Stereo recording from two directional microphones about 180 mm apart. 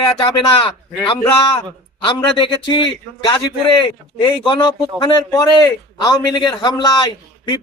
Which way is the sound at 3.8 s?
25° left (ahead or behind).